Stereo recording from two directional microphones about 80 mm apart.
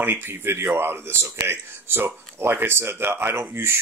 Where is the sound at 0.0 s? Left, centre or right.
Right.